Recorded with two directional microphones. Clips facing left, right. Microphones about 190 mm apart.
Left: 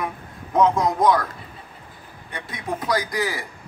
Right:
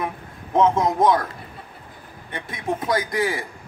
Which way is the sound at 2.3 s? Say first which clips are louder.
Right 3 dB; 25° right (ahead or behind).